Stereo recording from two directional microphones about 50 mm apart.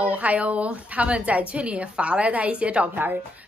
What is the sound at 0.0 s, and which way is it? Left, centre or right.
Speech, right.